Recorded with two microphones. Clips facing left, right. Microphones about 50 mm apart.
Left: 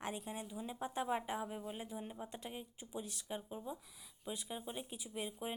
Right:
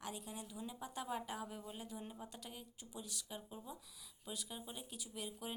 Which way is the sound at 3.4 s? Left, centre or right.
Left.